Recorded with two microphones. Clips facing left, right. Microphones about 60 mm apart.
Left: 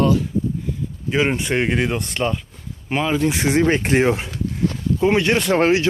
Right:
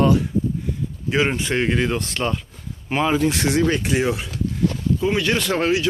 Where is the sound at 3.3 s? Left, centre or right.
Left.